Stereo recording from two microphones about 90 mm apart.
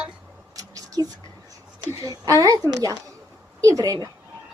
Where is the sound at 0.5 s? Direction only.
40° right (ahead or behind).